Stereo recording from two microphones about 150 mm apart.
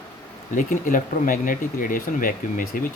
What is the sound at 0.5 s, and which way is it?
Speech, 60° left (ahead or behind).